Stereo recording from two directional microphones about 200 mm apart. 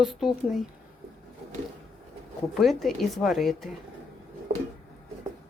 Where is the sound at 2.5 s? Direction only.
Centre (ahead or behind).